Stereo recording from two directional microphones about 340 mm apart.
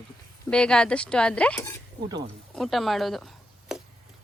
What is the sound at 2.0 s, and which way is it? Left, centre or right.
Speech, centre.